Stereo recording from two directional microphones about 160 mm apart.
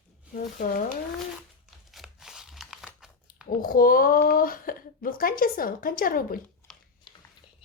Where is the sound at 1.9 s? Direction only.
Centre (ahead or behind).